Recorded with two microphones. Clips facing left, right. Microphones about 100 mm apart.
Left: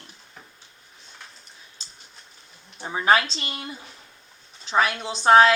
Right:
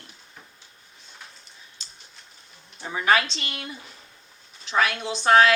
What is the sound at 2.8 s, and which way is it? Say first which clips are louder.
A woman's voice: left 2 dB; 25° left (ahead or behind).